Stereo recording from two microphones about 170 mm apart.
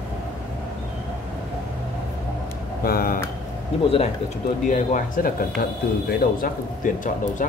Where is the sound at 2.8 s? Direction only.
60° left (ahead or behind).